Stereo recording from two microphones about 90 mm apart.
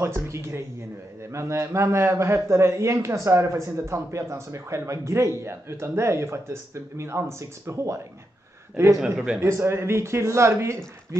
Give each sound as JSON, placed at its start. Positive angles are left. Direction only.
{"t": 0.0, "sound": "a man's voice", "side_deg": -30}
{"t": 9.4, "sound": "a man's voice", "side_deg": -30}